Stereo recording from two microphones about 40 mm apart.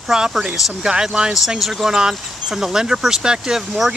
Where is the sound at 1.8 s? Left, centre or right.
Centre.